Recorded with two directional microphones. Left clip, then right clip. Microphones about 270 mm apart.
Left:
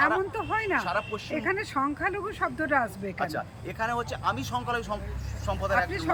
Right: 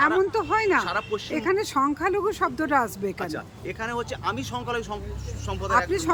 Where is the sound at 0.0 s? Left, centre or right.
Centre.